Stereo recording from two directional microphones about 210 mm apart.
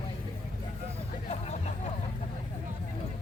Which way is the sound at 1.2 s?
30° left (ahead or behind).